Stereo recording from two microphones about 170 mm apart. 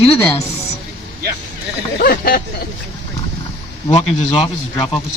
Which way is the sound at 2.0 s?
60° left (ahead or behind).